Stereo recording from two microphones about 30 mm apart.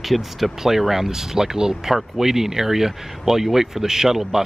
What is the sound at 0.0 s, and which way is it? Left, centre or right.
Speech, centre.